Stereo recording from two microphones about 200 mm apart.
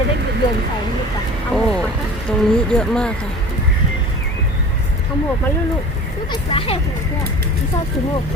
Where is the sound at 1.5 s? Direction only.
5° left (ahead or behind).